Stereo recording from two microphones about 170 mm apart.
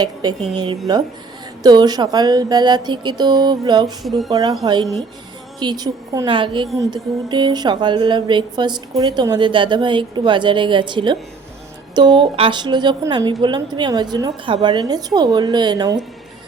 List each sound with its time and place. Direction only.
0.0 s speech: 25° right (ahead or behind)
4.0 s speech: centre (ahead or behind)
4.3 s speech: 25° right (ahead or behind)